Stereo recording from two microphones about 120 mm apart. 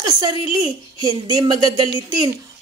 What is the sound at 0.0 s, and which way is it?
A woman's voice, 35° right (ahead or behind).